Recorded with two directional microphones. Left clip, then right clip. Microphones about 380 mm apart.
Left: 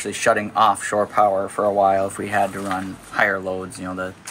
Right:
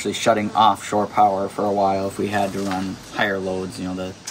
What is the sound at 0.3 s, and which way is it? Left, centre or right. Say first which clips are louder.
Speech: even; centre.